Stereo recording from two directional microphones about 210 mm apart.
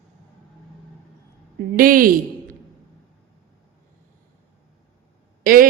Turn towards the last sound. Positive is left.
turn(degrees=-45)  # may be behind; listen again after turning